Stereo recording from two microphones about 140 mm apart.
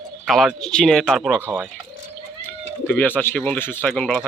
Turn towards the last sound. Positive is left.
turn(degrees=10)  # may be behind; listen again after turning